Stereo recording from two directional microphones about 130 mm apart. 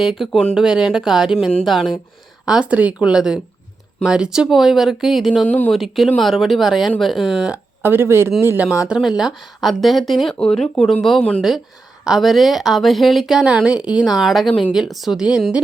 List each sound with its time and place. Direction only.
0.0 s speech: 5° right (ahead or behind)
8.8 s speech: 5° right (ahead or behind)